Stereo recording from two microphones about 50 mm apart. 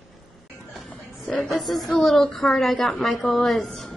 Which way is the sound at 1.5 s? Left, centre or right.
Centre.